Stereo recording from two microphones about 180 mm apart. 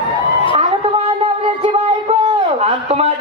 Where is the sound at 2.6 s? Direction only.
35° right (ahead or behind).